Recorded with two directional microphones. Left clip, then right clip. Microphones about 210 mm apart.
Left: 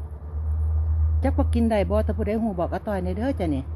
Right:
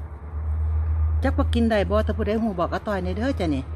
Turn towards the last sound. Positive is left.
turn(degrees=0)  # may be behind; listen again after turning